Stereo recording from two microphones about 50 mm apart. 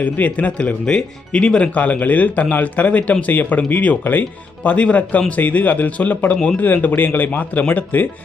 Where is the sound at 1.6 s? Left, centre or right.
Left.